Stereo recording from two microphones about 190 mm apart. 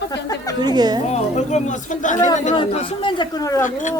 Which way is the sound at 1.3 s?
40° left (ahead or behind).